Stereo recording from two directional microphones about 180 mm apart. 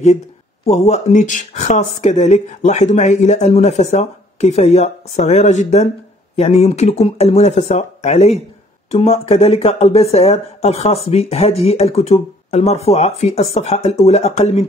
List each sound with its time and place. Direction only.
0.7 s speech: 35° left (ahead or behind)